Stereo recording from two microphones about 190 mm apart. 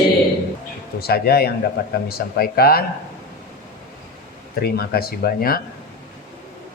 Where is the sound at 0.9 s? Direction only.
55° left (ahead or behind).